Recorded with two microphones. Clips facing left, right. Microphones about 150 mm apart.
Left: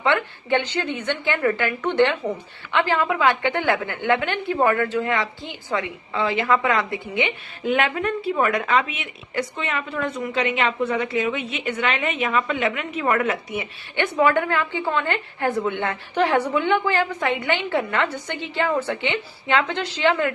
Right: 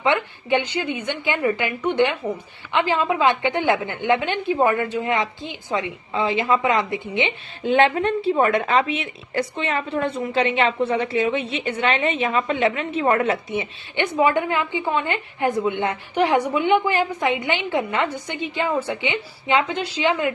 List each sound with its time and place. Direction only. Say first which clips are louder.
0.0 s a woman's voice: right 1 dB; 15° right (ahead or behind)